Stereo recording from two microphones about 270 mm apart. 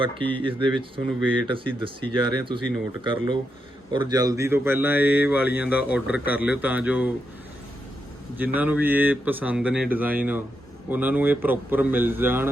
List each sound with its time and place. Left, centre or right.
0.0 s a man's voice: centre
8.5 s speech: centre